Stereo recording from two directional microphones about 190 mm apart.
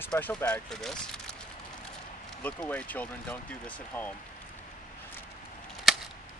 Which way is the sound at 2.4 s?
5° left (ahead or behind).